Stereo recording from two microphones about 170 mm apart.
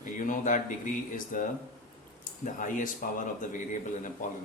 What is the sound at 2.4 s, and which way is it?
Speech, 50° left (ahead or behind).